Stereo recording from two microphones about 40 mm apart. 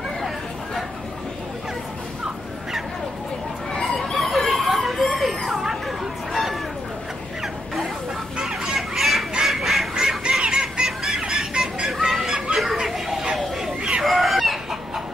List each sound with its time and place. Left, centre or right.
3.8 s a sound: centre
5.5 s chatter: centre
8.4 s chicken: centre
9.5 s duck: centre
9.9 s fowl: centre
11.1 s chicken: centre
12.3 s children playing: right
12.8 s a sound: centre
14.0 s chicken: centre